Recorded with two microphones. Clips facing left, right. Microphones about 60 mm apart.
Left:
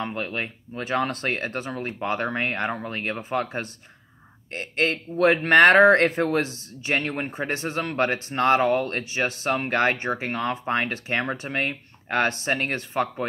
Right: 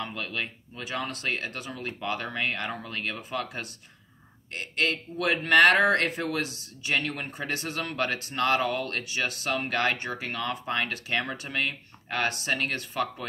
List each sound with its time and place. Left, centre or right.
0.0 s speech: left